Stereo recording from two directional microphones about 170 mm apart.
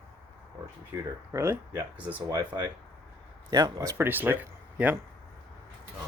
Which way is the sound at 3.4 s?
25° right (ahead or behind).